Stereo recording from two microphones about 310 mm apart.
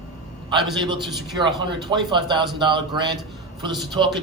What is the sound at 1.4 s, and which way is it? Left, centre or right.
A man's voice, centre.